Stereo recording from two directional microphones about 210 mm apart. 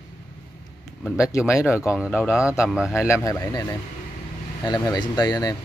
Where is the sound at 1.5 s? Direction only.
15° left (ahead or behind).